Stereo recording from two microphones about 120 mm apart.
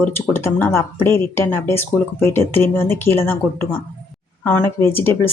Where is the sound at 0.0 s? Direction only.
20° left (ahead or behind).